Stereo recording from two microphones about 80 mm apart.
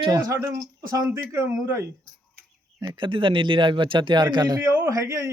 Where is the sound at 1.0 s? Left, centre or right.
Right.